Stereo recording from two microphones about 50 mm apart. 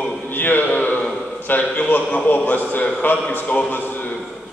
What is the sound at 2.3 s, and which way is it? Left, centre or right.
Speech, left.